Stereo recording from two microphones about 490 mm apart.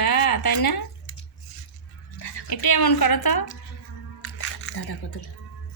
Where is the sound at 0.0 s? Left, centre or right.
Left.